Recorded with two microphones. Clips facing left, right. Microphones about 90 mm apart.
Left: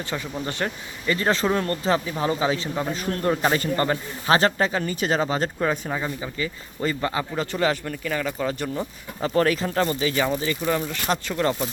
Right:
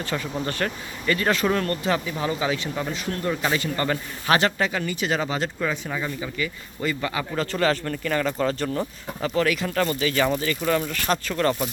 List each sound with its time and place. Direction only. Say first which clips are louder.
0.0 s a man's voice: right 2 dB; 20° left (ahead or behind)
7.3 s speech: right 3 dB; 20° left (ahead or behind)
9.3 s speech: left 2 dB; 35° left (ahead or behind); by 11.5 s 20° left (ahead or behind)